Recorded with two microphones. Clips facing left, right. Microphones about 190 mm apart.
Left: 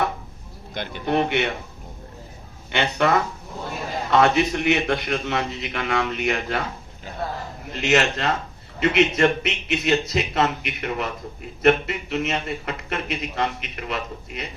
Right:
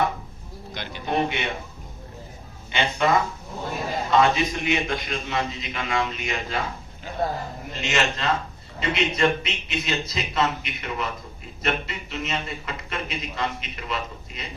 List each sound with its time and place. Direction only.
0.7 s a sound: 55° left (ahead or behind)
2.7 s a man's voice: 65° left (ahead or behind)
7.8 s a man's voice: 65° left (ahead or behind)